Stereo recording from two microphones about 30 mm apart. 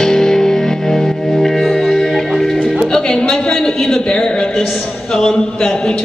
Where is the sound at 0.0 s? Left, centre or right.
Centre.